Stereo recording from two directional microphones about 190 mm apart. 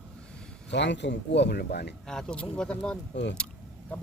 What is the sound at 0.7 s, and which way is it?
Speech, 65° left (ahead or behind).